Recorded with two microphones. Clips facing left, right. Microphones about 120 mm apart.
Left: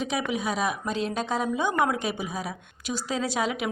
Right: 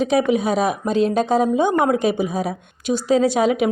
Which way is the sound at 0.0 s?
30° right (ahead or behind).